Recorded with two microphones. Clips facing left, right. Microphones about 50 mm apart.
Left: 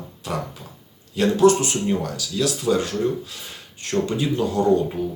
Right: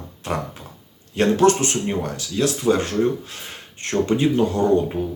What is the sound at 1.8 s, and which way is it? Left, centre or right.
Speech, right.